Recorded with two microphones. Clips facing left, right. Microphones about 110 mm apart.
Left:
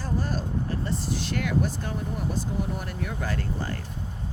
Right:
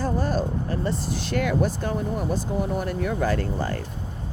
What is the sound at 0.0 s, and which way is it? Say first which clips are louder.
Speech: right 5 dB; 55° right (ahead or behind).